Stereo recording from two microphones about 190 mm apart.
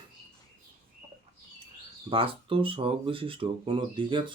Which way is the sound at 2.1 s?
30° right (ahead or behind).